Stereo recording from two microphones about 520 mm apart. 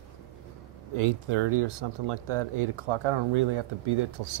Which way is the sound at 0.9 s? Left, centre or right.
Right.